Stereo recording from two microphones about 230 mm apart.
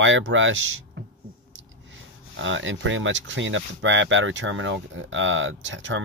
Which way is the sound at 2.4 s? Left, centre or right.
Right.